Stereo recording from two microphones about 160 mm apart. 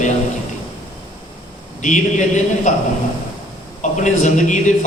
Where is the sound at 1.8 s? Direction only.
50° left (ahead or behind).